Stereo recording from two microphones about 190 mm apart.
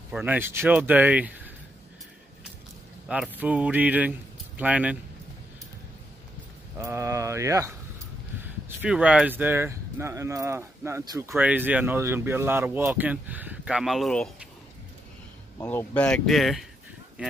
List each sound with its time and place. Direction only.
0.1 s speech: 10° right (ahead or behind)
3.1 s speech: 5° right (ahead or behind)
6.8 s speech: 15° right (ahead or behind); by 14.3 s centre (ahead or behind)
15.6 s speech: 10° left (ahead or behind)